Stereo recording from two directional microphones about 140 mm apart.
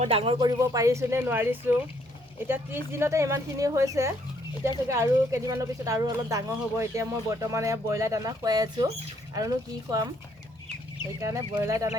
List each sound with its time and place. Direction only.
0.0 s speech: 45° right (ahead or behind)
0.3 s speech: 25° right (ahead or behind)
11.2 s speech: 20° right (ahead or behind)